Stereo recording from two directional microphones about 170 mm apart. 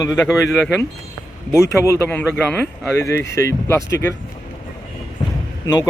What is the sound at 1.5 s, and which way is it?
Speech, 15° left (ahead or behind).